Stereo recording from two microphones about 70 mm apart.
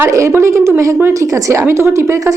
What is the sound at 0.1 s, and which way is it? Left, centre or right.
A woman's voice, right.